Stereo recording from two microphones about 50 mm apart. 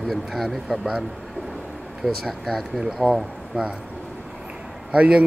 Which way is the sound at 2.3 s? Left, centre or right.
Centre.